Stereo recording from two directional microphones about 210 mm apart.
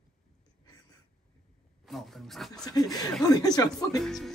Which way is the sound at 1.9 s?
Centre (ahead or behind).